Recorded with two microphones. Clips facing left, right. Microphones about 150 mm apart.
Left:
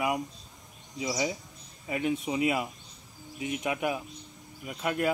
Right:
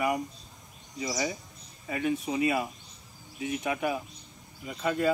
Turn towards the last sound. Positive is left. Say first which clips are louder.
# right 1 dB
turn(degrees=10)  # may be behind; listen again after turning